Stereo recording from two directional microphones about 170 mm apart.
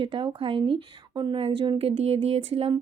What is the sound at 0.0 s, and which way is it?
Speech, 30° right (ahead or behind).